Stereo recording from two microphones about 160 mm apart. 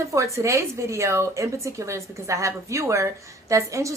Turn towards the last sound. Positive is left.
turn(degrees=-20)  # may be behind; listen again after turning